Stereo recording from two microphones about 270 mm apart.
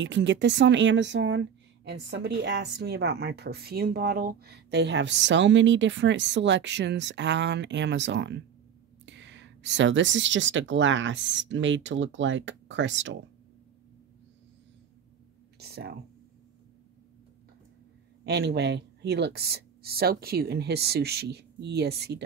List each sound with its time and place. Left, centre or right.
0.0 s speech: right
15.6 s speech: right
18.2 s speech: right